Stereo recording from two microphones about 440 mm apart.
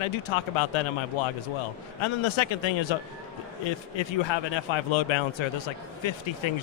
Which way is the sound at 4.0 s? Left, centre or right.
Left.